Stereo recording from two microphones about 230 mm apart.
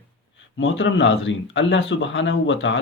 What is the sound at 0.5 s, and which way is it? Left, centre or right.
Speech, left.